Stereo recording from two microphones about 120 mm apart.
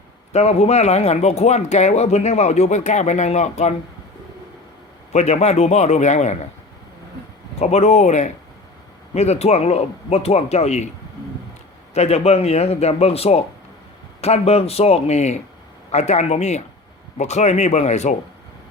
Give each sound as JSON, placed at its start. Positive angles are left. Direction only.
{"t": 0.3, "sound": "speech", "side_deg": 60}
{"t": 5.1, "sound": "speech", "side_deg": 65}
{"t": 7.6, "sound": "speech", "side_deg": 65}
{"t": 11.9, "sound": "speech", "side_deg": 60}